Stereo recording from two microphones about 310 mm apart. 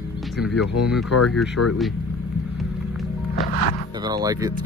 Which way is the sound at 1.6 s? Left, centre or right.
Left.